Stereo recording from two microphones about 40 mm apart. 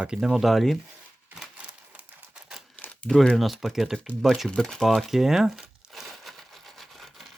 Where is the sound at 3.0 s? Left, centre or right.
Centre.